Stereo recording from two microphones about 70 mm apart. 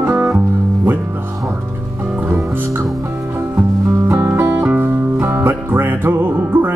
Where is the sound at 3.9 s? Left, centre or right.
Right.